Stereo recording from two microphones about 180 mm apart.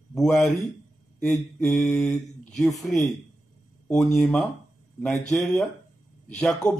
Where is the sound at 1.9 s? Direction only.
5° left (ahead or behind).